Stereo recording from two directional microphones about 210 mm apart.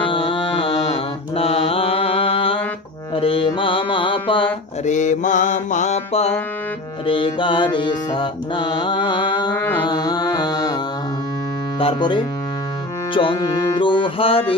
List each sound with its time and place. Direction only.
0.0 s mantra: 25° left (ahead or behind)
3.2 s music: 25° left (ahead or behind)
4.8 s mantra: 35° left (ahead or behind)
7.1 s music: 25° left (ahead or behind)
11.8 s music: 20° left (ahead or behind)